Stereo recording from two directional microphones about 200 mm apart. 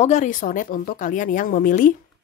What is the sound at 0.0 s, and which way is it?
Speech, 35° left (ahead or behind).